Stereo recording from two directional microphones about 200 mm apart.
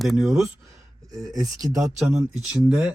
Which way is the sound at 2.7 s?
5° right (ahead or behind).